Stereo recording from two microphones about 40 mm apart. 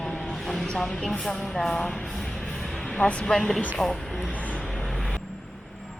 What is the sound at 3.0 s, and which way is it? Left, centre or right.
Speech, left.